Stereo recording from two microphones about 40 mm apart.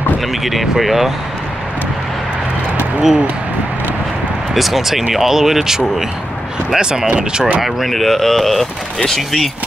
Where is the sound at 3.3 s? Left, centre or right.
Right.